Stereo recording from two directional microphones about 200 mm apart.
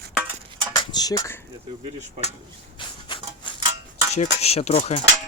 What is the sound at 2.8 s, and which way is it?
Rub, 25° left (ahead or behind).